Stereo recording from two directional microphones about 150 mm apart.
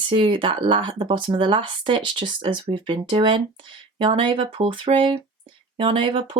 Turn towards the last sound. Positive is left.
turn(degrees=-35)  # may be behind; listen again after turning